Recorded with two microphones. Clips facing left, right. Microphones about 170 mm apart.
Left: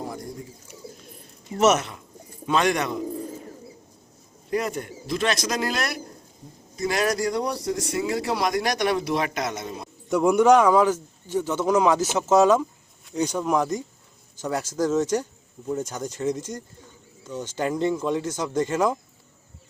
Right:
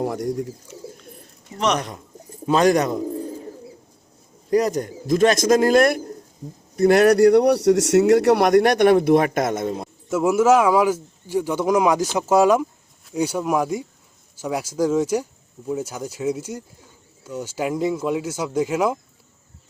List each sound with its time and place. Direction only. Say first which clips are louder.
0.0 s speech: right 10 dB; 75° right (ahead or behind)
1.5 s speech: left 3 dB; 5° left (ahead or behind)
2.5 s a man's voice: right 6 dB; 35° right (ahead or behind)
4.5 s a man's voice: right 7 dB; 40° right (ahead or behind)
10.1 s speech: right 1 dB; 5° right (ahead or behind)